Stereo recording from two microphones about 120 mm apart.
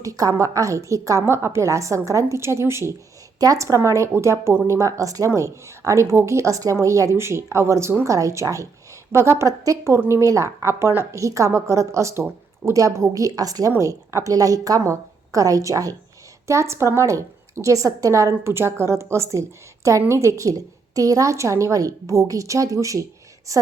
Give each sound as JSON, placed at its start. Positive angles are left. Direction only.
{"t": 0.0, "sound": "a woman's voice", "side_deg": -25}